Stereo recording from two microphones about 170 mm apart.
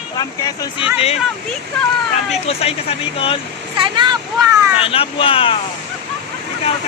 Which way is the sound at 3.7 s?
30° right (ahead or behind).